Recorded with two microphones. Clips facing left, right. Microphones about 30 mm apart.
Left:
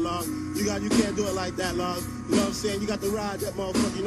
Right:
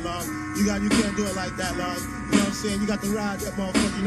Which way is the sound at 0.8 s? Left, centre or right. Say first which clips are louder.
Left 1 dB; right.